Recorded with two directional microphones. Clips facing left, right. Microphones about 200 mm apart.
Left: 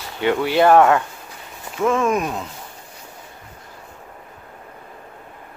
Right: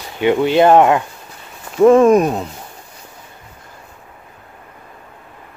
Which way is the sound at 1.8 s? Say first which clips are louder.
Right 10 dB; 35° right (ahead or behind).